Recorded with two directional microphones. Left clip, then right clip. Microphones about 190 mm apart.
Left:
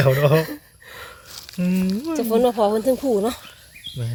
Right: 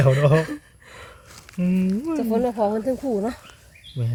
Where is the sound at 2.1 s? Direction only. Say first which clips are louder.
Left 5 dB; 40° left (ahead or behind).